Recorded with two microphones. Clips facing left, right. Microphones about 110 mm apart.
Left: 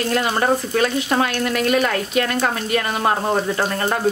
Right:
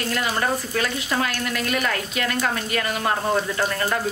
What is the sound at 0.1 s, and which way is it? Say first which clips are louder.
Speech: left 5 dB; 35° left (ahead or behind).